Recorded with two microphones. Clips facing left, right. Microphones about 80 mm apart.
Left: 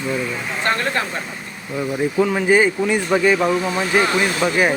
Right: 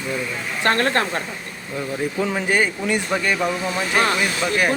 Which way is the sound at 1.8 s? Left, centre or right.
Centre.